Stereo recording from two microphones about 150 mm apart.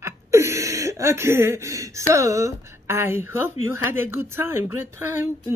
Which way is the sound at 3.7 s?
15° right (ahead or behind).